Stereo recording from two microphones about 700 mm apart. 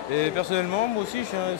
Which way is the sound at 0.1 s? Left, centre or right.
Left.